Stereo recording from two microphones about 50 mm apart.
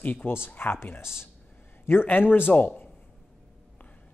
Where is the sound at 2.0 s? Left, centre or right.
Left.